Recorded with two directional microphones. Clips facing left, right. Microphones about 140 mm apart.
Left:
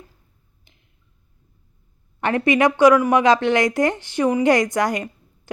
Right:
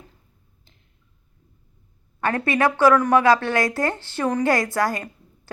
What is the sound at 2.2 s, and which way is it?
A woman's voice, 15° left (ahead or behind).